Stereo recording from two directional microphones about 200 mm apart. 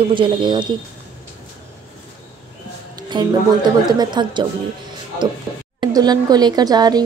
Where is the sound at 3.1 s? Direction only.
20° right (ahead or behind).